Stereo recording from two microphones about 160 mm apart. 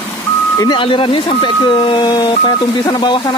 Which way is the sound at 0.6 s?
30° left (ahead or behind).